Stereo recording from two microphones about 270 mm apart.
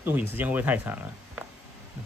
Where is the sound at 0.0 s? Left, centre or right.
Centre.